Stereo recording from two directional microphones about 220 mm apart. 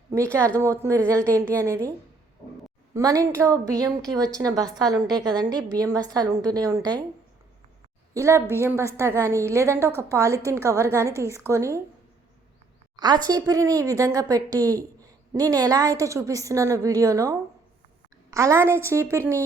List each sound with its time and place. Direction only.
0.2 s speech: 5° left (ahead or behind)
0.5 s speech: 15° right (ahead or behind)
2.9 s speech: 15° right (ahead or behind)
5.0 s a woman's voice: centre (ahead or behind)
5.4 s speech: 15° right (ahead or behind)
8.1 s speech: 15° right (ahead or behind)
13.0 s speech: 20° right (ahead or behind)